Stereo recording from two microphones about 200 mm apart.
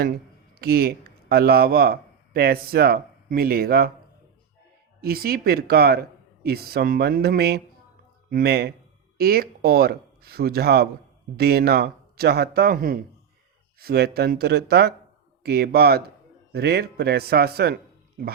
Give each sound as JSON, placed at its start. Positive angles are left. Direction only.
{"t": 0.5, "sound": "speech", "side_deg": -50}
{"t": 4.9, "sound": "speech", "side_deg": -50}